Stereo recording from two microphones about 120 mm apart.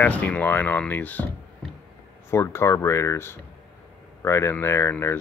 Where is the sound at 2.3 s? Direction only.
20° left (ahead or behind).